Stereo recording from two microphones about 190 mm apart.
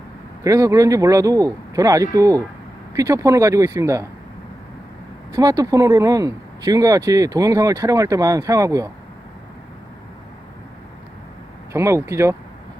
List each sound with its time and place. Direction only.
0.4 s speech: 15° right (ahead or behind)
5.3 s speech: 20° right (ahead or behind)
11.7 s speech: 15° right (ahead or behind)